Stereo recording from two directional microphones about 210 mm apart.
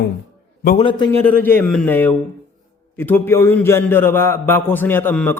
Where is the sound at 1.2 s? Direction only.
10° left (ahead or behind).